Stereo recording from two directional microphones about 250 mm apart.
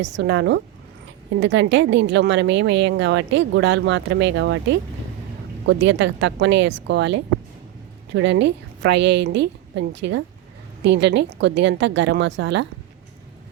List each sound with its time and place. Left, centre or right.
0.0 s speech: right